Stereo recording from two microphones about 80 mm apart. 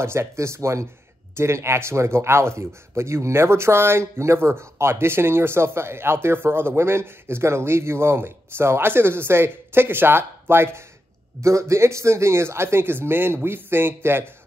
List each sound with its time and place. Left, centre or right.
0.0 s speech: right